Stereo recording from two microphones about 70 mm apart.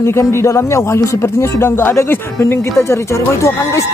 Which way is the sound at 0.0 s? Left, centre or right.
Left.